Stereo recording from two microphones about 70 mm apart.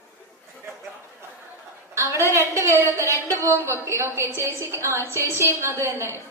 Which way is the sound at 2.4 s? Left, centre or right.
Right.